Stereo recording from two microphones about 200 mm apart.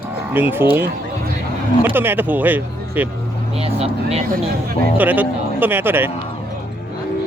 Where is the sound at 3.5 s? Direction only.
30° right (ahead or behind).